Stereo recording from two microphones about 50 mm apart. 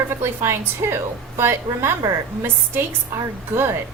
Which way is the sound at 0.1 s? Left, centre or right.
Right.